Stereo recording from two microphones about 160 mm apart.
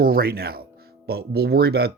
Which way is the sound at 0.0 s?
70° right (ahead or behind).